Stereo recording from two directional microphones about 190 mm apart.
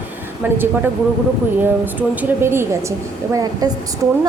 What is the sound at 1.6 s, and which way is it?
A woman's voice, 10° right (ahead or behind).